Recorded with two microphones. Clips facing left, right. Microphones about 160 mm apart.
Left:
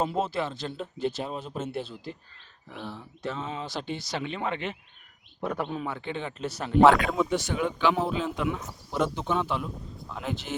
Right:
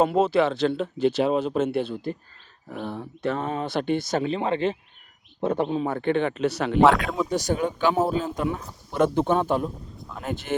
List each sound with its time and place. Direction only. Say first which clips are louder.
0.0 s speech: right 8 dB; 70° right (ahead or behind)
2.6 s speech: right 7 dB; 50° right (ahead or behind); by 5.8 s 25° right (ahead or behind)
5.8 s a man's voice: right 10 dB; 50° right (ahead or behind); by 6.7 s 70° right (ahead or behind)
6.7 s speech: left 1 dB; centre (ahead or behind)
7.3 s speech: right 3 dB; 40° right (ahead or behind)
9.0 s speech: right 6 dB; 55° right (ahead or behind)